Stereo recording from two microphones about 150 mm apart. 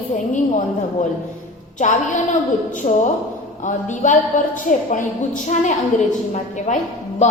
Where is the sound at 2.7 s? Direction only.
55° left (ahead or behind).